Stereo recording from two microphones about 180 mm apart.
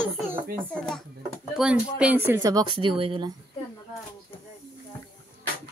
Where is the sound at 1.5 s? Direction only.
5° right (ahead or behind); by 3.3 s 30° right (ahead or behind).